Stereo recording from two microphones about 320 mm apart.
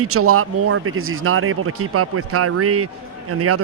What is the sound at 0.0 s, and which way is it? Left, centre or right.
Speech, right.